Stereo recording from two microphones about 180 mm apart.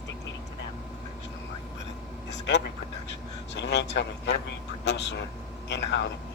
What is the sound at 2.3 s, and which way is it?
A man's voice, 75° left (ahead or behind).